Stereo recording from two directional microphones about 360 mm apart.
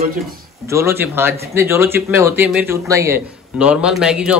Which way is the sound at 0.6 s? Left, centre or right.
Centre.